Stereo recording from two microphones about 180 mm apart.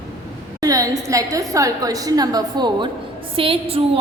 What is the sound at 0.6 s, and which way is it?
A woman's voice, 20° right (ahead or behind).